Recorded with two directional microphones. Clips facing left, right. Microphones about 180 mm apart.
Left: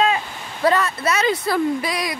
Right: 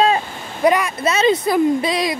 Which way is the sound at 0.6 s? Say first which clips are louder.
Right 2 dB; 15° right (ahead or behind).